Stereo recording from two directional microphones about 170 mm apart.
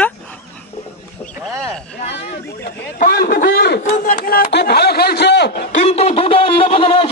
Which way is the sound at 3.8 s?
50° left (ahead or behind).